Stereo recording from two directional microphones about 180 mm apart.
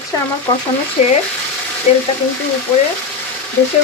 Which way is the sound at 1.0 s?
35° left (ahead or behind).